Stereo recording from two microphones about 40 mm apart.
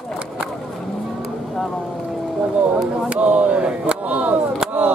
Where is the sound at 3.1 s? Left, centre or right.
Right.